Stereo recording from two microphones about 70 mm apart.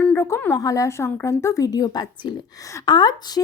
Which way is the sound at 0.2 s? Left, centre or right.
Left.